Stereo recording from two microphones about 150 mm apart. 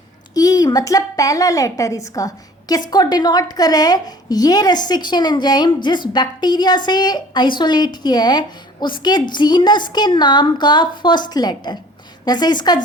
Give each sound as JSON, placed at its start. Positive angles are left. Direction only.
{"t": 0.3, "sound": "a woman's voice", "side_deg": 25}